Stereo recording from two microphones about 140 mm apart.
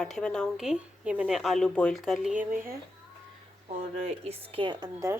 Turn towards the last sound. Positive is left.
turn(degrees=-25)  # may be behind; listen again after turning